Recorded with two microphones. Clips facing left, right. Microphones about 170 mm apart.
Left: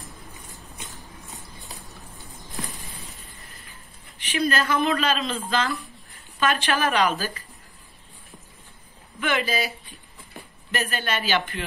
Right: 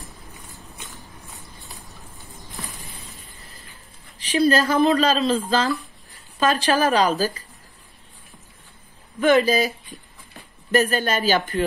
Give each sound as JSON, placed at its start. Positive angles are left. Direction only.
{"t": 4.2, "sound": "speech", "side_deg": -35}
{"t": 9.2, "sound": "speech", "side_deg": -40}
{"t": 10.7, "sound": "speech", "side_deg": -40}